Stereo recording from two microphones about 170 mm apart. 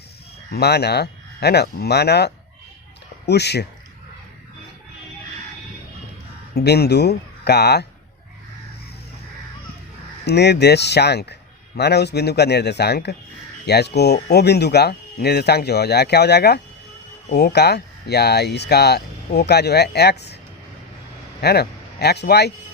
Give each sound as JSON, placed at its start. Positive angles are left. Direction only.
{"t": 0.5, "sound": "speech", "side_deg": 75}
{"t": 6.5, "sound": "speech", "side_deg": 70}
{"t": 10.2, "sound": "speech", "side_deg": 80}
{"t": 21.4, "sound": "speech", "side_deg": 70}